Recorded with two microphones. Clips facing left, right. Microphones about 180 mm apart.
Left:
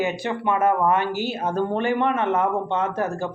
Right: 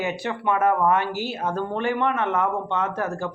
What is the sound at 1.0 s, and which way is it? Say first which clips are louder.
Speech: left 2 dB; 5° right (ahead or behind).